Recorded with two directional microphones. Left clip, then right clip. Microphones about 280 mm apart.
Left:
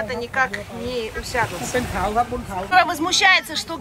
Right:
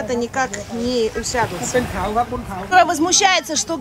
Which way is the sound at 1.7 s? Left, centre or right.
Centre.